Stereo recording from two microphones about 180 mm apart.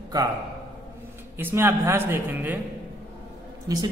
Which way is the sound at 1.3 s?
10° right (ahead or behind).